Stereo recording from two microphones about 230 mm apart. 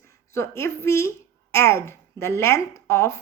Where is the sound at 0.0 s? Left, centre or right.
Centre.